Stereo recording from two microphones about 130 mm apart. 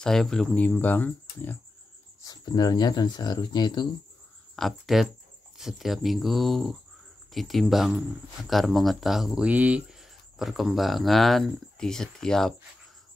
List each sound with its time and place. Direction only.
0.0 s speech: 5° left (ahead or behind)
2.2 s speech: 30° left (ahead or behind)
4.6 s speech: centre (ahead or behind)